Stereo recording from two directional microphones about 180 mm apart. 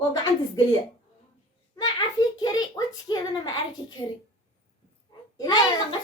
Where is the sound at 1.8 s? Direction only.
25° left (ahead or behind).